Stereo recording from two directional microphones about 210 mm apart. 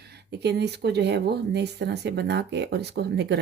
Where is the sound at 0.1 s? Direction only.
50° right (ahead or behind).